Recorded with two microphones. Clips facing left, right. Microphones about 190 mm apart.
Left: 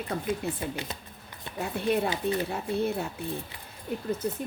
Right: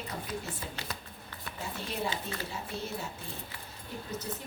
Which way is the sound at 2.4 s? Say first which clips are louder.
Left 10 dB; 60° left (ahead or behind).